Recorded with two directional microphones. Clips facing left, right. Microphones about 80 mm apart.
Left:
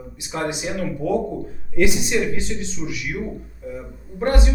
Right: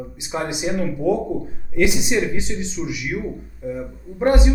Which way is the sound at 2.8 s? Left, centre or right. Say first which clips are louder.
Right 4 dB; centre.